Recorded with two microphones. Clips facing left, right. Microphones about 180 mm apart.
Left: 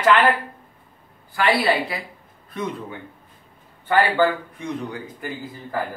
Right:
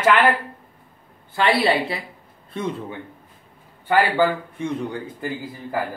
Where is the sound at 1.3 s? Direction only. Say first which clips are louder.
Right 1 dB; 25° right (ahead or behind).